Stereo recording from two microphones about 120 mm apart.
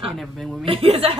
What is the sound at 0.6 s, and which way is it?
Speech, 50° right (ahead or behind).